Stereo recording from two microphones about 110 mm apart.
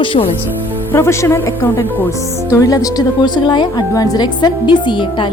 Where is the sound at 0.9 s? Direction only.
25° left (ahead or behind); by 3.8 s 45° left (ahead or behind).